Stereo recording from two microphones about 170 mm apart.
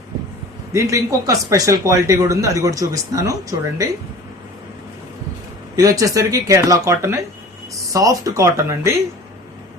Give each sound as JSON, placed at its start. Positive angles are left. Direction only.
{"t": 0.7, "sound": "speech", "side_deg": -15}
{"t": 5.7, "sound": "speech", "side_deg": -20}